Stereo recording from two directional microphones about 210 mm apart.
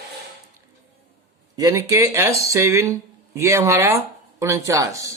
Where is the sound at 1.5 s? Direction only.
15° right (ahead or behind).